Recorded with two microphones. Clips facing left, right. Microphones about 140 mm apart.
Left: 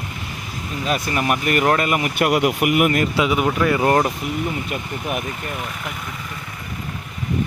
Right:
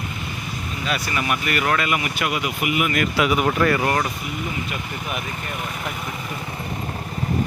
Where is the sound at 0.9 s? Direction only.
45° left (ahead or behind).